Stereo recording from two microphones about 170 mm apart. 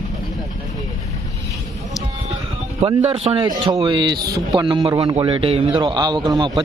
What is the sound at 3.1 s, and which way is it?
A man's voice, 35° right (ahead or behind).